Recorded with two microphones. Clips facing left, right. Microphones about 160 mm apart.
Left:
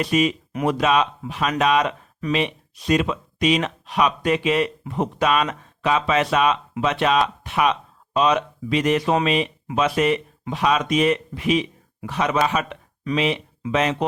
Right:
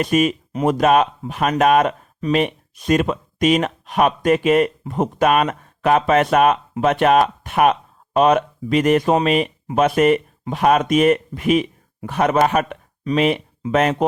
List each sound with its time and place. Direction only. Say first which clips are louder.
0.0 s speech: right 3 dB; 50° right (ahead or behind)